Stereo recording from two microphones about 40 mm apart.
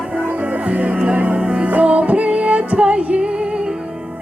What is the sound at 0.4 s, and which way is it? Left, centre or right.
Music, right.